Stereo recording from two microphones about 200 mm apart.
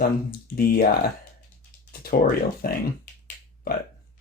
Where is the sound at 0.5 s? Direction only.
50° left (ahead or behind).